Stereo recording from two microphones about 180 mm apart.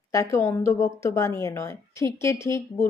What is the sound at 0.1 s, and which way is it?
A woman's voice, 15° left (ahead or behind).